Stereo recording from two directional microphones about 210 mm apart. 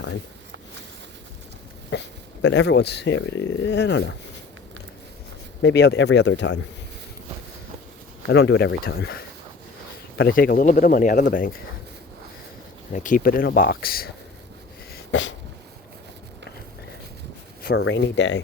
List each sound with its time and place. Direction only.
1.9 s speech: 55° left (ahead or behind)
5.6 s speech: 55° left (ahead or behind)
8.3 s speech: 55° left (ahead or behind)
12.9 s speech: 40° left (ahead or behind)
14.9 s a sound: 60° left (ahead or behind)
17.6 s a sound: 45° left (ahead or behind)
17.8 s speech: 60° left (ahead or behind)